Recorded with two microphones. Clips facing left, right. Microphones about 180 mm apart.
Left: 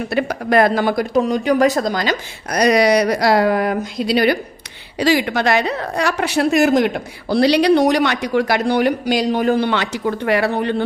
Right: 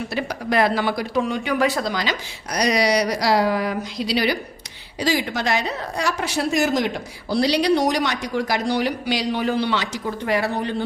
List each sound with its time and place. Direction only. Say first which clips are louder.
0.1 s speech: left 8 dB; 55° left (ahead or behind)
4.9 s a woman's voice: left 6 dB; 65° left (ahead or behind)